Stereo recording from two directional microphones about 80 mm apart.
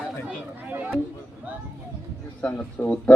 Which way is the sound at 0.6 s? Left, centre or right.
Right.